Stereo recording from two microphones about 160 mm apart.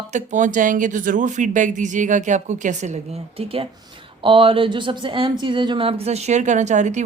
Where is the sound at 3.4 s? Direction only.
35° right (ahead or behind).